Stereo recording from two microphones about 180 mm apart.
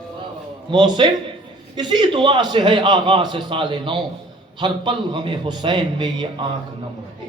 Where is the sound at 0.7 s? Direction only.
25° right (ahead or behind).